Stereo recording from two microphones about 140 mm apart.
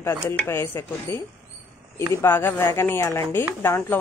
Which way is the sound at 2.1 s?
15° left (ahead or behind).